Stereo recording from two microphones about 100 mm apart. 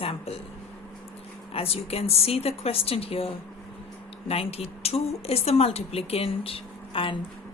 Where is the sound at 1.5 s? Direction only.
80° left.